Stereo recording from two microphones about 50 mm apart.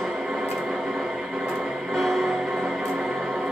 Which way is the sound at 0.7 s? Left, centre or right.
Centre.